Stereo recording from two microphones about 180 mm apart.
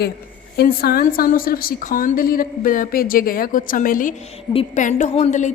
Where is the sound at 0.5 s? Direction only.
60° left (ahead or behind).